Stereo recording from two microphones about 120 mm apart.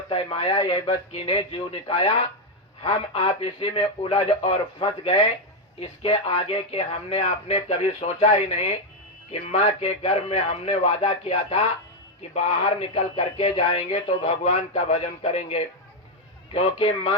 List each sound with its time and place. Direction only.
0.1 s a man's voice: 50° left (ahead or behind)
16.5 s a man's voice: 50° left (ahead or behind)